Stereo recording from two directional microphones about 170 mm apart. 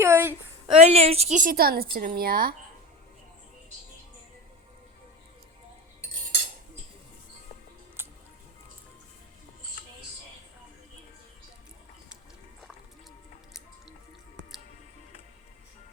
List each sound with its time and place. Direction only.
0.0 s a sound: 15° right (ahead or behind)
0.7 s a woman's voice: 40° right (ahead or behind); by 2.6 s 60° right (ahead or behind)
8.0 s music: 15° right (ahead or behind)